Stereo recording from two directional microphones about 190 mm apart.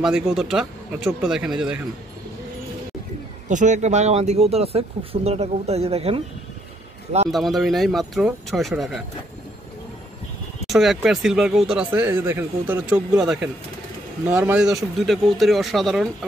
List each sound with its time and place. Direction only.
0.0 s speech: 5° right (ahead or behind)
3.4 s speech: 40° right (ahead or behind)
7.2 s speech: centre (ahead or behind)
10.7 s speech: centre (ahead or behind)